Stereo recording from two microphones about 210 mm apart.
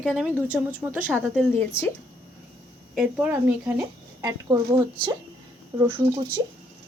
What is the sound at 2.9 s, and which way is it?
Speech, 5° right (ahead or behind).